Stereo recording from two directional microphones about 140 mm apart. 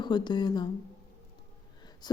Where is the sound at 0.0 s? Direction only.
30° left (ahead or behind).